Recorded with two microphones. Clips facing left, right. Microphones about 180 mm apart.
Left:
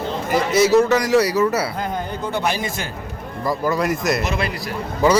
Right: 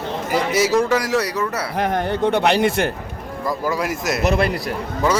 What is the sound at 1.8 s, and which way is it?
Speech, 75° right (ahead or behind).